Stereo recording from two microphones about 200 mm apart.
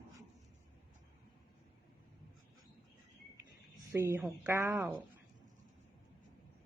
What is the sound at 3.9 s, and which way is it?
Speech, 15° right (ahead or behind).